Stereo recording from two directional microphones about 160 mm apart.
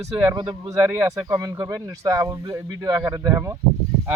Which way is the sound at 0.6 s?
15° right (ahead or behind).